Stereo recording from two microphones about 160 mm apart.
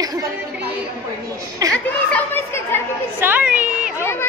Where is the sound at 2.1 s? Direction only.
15° left (ahead or behind).